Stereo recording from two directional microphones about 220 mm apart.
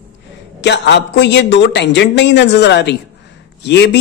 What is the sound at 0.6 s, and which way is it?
A man's voice, 50° left (ahead or behind).